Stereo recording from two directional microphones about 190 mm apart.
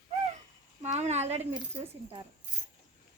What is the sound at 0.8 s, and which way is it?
Speech, 35° right (ahead or behind).